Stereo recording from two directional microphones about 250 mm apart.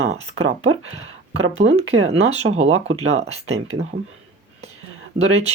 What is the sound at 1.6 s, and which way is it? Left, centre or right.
Speech, right.